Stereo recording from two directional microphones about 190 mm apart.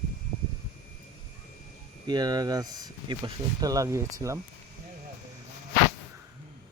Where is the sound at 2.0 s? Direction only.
20° right (ahead or behind).